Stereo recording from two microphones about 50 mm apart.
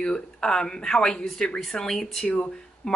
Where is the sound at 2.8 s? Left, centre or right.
Centre.